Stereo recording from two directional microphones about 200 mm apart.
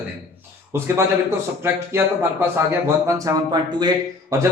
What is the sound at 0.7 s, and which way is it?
Speech, 10° right (ahead or behind).